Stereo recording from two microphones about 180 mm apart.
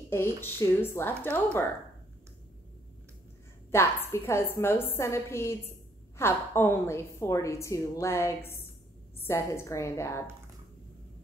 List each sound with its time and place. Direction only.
0.1 s a woman's voice: 15° left (ahead or behind)
3.7 s a woman's voice: 15° left (ahead or behind)